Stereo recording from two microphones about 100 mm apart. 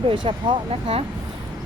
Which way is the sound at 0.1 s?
55° right (ahead or behind).